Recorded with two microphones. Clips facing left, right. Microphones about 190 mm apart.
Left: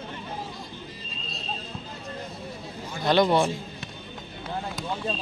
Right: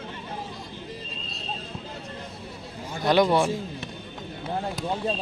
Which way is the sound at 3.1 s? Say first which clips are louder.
Right 1 dB; 10° right (ahead or behind).